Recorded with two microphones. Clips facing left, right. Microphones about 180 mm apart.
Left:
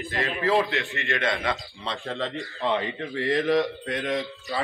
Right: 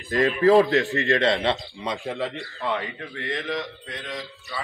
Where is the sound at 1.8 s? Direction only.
15° right (ahead or behind).